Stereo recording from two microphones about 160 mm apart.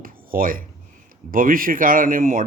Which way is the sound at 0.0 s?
60° right (ahead or behind).